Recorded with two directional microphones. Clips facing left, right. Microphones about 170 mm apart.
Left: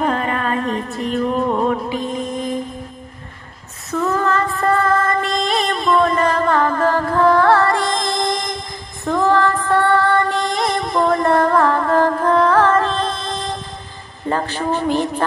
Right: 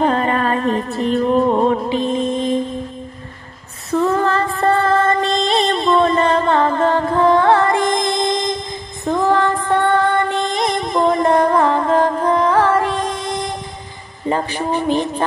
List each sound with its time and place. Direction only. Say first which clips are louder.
0.0 s music: right 3 dB; 30° right (ahead or behind)
3.9 s music: right 2 dB; 30° right (ahead or behind)
9.0 s female singing: even; 15° right (ahead or behind)
14.2 s speech: right 1 dB; 15° right (ahead or behind)